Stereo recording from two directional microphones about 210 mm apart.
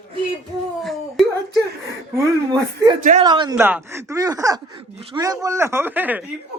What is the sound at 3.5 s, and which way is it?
A woman's voice, 10° right (ahead or behind).